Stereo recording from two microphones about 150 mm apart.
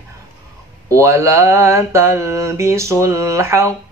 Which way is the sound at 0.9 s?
20° right (ahead or behind).